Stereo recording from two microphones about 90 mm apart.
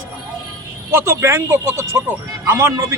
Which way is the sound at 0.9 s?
30° right (ahead or behind).